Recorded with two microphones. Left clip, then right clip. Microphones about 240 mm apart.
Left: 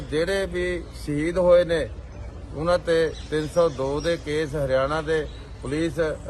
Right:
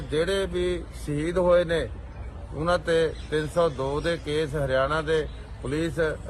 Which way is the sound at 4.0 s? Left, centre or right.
Left.